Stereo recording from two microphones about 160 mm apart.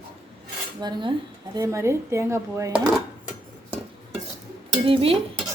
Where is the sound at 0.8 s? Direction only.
25° right (ahead or behind).